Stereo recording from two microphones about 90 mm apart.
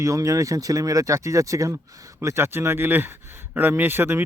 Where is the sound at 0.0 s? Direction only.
40° right (ahead or behind).